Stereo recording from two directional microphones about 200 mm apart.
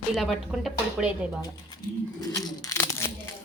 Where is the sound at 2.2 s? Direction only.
20° left (ahead or behind).